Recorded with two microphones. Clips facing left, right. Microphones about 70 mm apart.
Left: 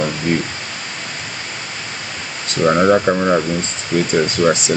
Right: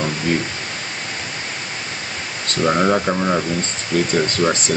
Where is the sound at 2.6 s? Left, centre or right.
Centre.